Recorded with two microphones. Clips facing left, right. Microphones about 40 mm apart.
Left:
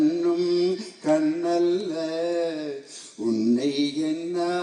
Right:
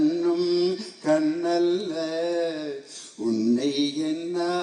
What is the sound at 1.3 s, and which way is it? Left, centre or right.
Music, right.